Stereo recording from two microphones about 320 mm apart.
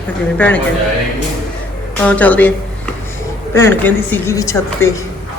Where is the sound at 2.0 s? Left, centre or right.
Centre.